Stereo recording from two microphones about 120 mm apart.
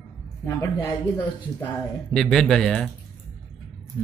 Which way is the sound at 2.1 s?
5° left (ahead or behind).